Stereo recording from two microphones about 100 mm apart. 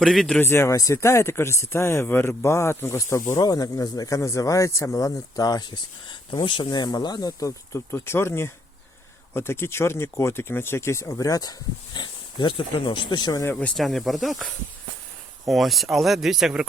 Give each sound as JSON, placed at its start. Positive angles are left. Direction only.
{"t": 0.0, "sound": "speech", "side_deg": 5}
{"t": 0.4, "sound": "speech", "side_deg": 25}
{"t": 11.9, "sound": "speech", "side_deg": 50}
{"t": 13.4, "sound": "speech", "side_deg": 20}
{"t": 13.7, "sound": "speech", "side_deg": 0}
{"t": 15.4, "sound": "speech", "side_deg": 0}